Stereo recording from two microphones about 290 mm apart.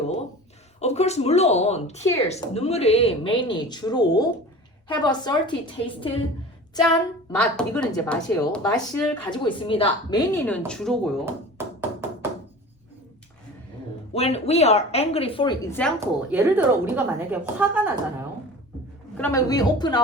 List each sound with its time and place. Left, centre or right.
0.8 s a woman's voice: left; by 9.0 s centre
9.3 s a man's voice: centre
11.5 s tap: centre
14.1 s a woman's voice: left
16.0 s a woman's voice: centre
19.1 s a man's voice: centre